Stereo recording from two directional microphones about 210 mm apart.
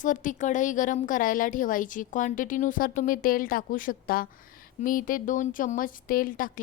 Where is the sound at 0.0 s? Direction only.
40° left (ahead or behind).